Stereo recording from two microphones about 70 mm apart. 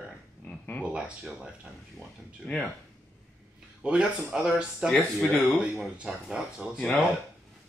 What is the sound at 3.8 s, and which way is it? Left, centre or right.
Speech, centre.